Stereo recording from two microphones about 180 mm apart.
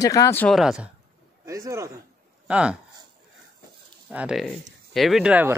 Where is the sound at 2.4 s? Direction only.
5° right (ahead or behind).